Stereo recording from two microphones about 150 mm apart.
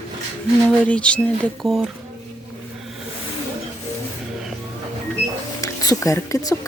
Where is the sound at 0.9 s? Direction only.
10° left (ahead or behind).